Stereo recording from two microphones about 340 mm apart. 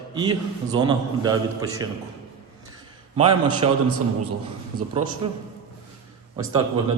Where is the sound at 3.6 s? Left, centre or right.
Centre.